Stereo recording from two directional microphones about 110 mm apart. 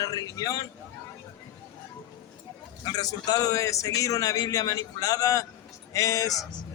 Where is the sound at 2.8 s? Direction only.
35° left (ahead or behind).